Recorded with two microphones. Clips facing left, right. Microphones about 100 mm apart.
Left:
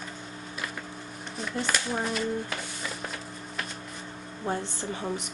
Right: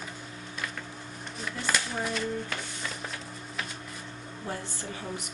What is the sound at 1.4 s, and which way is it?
Speech, centre (ahead or behind).